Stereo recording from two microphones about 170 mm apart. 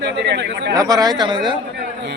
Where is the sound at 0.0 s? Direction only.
90° right.